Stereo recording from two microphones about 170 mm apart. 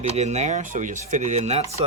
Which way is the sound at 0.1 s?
40° right (ahead or behind).